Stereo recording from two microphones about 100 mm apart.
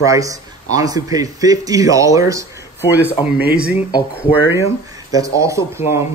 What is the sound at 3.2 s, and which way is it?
Speech, 60° left (ahead or behind).